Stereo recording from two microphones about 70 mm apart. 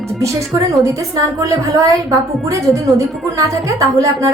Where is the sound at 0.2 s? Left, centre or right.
Right.